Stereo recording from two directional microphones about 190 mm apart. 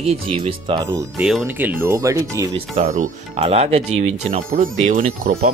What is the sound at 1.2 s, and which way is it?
Speech, centre (ahead or behind).